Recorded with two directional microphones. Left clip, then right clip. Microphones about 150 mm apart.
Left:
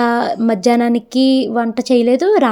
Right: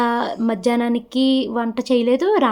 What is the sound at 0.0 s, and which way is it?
Speech, 30° left (ahead or behind).